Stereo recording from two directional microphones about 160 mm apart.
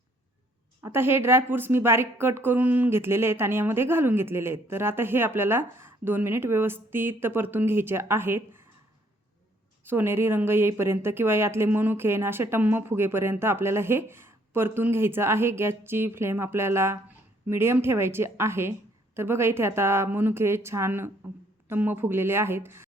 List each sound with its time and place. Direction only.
0.8 s a woman's voice: 15° right (ahead or behind)
9.8 s a woman's voice: 15° right (ahead or behind)